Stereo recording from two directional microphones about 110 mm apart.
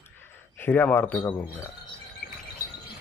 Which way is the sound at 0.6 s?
20° left (ahead or behind).